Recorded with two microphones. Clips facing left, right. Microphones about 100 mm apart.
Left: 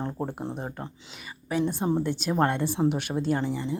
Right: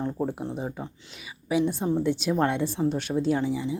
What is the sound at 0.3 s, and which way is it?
Speech, centre (ahead or behind).